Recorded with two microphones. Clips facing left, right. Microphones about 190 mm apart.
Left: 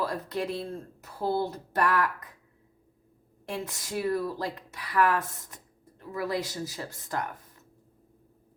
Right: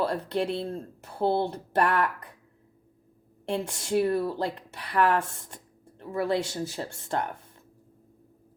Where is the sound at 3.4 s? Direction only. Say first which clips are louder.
Right 6 dB; 30° right (ahead or behind).